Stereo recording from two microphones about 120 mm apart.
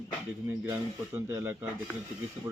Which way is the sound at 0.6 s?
20° right (ahead or behind).